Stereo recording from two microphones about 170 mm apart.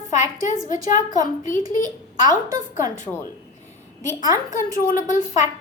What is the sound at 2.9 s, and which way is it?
Speech, 45° left (ahead or behind).